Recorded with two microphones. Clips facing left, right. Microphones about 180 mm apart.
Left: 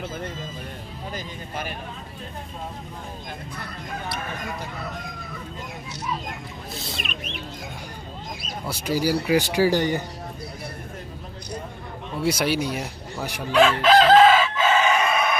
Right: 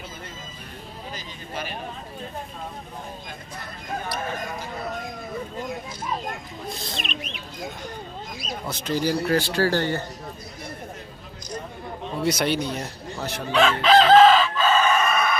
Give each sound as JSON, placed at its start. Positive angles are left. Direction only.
{"t": 8.6, "sound": "speech", "side_deg": 10}
{"t": 12.2, "sound": "chicken", "side_deg": 5}
{"t": 14.6, "sound": "crowing", "side_deg": 15}